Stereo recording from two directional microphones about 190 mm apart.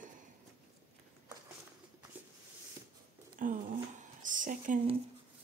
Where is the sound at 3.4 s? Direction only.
45° right (ahead or behind).